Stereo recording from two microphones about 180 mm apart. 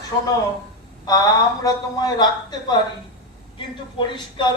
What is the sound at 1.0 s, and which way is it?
Speech, 20° left (ahead or behind).